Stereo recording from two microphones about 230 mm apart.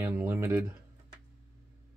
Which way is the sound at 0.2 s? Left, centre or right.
Centre.